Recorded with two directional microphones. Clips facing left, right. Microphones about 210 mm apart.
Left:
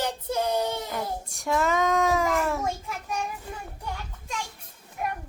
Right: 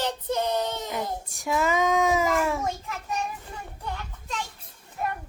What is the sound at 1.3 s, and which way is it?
Child singing, centre (ahead or behind).